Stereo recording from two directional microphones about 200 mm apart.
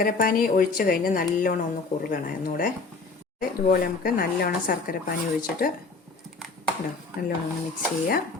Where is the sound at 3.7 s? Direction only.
45° left (ahead or behind).